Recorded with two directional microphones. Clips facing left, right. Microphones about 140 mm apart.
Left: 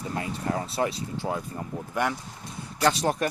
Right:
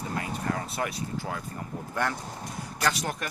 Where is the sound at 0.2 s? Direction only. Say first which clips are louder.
Left 2 dB; 25° left (ahead or behind).